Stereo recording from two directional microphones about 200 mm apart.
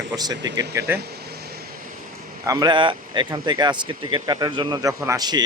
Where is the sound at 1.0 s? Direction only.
50° right (ahead or behind).